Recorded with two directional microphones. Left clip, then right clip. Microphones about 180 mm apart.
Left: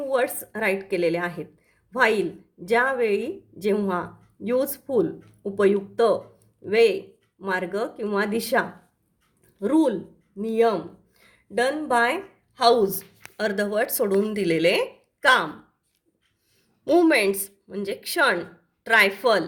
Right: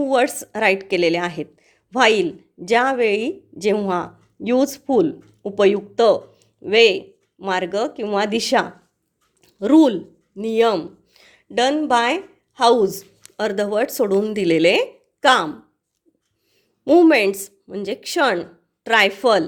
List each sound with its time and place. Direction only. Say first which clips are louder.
0.0 s a woman's voice: right 6 dB; 35° right (ahead or behind)
16.8 s a woman's voice: right 5 dB; 35° right (ahead or behind)